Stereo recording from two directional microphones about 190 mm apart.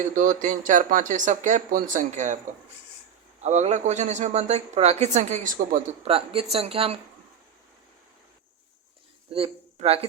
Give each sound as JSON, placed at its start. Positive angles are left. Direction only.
{"t": 0.0, "sound": "speech", "side_deg": -45}
{"t": 3.4, "sound": "speech", "side_deg": -35}
{"t": 6.1, "sound": "speech", "side_deg": -30}
{"t": 9.3, "sound": "speech", "side_deg": -30}